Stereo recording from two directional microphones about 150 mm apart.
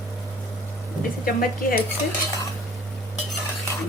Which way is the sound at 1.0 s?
70° left (ahead or behind).